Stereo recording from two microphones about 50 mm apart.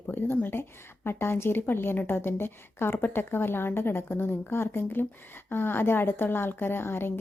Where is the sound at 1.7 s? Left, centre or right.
Left.